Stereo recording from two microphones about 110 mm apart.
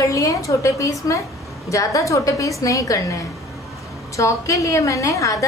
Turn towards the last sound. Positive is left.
turn(degrees=30)  # may be behind; listen again after turning